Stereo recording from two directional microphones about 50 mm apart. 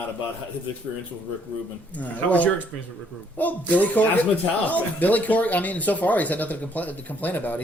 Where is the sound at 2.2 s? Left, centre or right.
Left.